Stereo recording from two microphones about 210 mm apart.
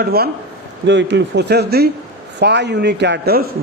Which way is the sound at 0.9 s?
55° right (ahead or behind).